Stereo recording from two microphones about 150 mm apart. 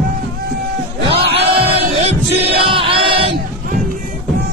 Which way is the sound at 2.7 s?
35° right (ahead or behind).